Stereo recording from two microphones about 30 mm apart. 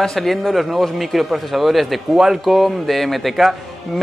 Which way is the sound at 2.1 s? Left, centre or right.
Centre.